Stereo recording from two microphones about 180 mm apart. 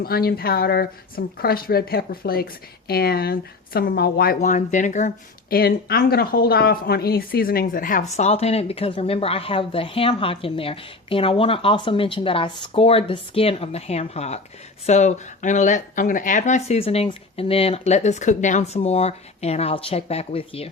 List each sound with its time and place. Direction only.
0.0 s speech: 60° left (ahead or behind)
4.4 s speech: 45° left (ahead or behind)